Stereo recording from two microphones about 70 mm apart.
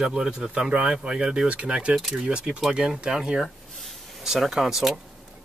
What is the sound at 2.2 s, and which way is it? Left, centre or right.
Speech, centre.